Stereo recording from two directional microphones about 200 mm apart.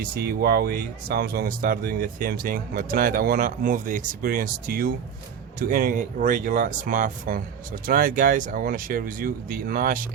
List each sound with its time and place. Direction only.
0.0 s speech: 50° right (ahead or behind)